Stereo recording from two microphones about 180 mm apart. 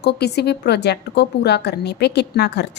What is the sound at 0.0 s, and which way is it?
A woman's voice, 65° left (ahead or behind).